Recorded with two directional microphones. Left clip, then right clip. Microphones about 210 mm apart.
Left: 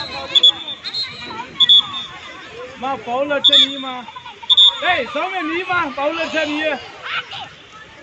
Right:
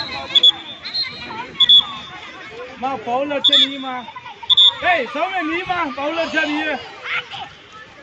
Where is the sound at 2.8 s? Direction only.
20° right (ahead or behind).